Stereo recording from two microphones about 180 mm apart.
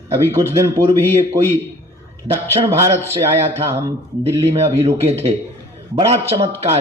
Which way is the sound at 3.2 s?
15° right (ahead or behind).